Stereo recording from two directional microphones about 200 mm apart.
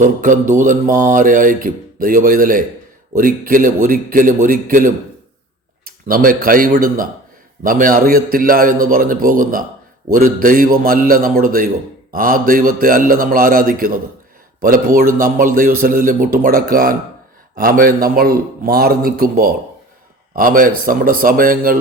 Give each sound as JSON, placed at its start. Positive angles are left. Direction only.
{"t": 0.0, "sound": "mantra", "side_deg": -40}
{"t": 5.8, "sound": "a man's voice", "side_deg": -45}
{"t": 7.6, "sound": "mantra", "side_deg": -45}